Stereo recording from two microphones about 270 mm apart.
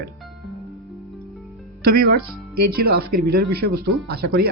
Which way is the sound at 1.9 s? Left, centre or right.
Right.